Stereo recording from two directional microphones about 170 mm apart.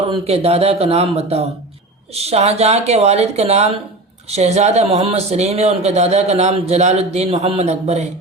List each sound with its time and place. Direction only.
0.1 s speech: 35° right (ahead or behind)